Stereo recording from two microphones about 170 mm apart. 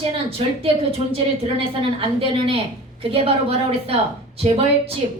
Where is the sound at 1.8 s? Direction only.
30° right (ahead or behind).